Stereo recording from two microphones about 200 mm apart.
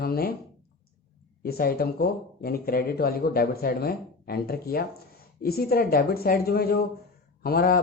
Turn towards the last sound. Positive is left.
turn(degrees=50)  # may be behind; listen again after turning